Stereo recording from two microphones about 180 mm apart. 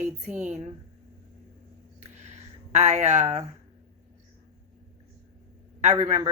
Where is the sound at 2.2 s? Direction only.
40° right (ahead or behind).